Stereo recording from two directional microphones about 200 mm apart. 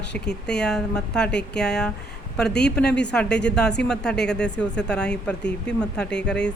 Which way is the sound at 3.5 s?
5° left (ahead or behind).